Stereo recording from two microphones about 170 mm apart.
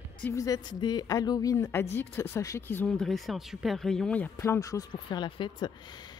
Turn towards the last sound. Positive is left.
turn(degrees=25)  # may be behind; listen again after turning